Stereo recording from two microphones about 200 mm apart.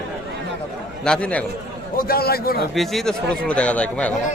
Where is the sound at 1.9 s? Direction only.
50° left (ahead or behind).